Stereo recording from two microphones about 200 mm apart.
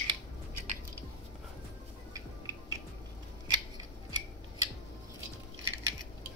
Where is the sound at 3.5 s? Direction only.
20° right (ahead or behind).